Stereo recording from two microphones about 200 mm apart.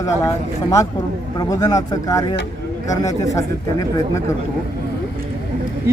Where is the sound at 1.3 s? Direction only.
15° left (ahead or behind).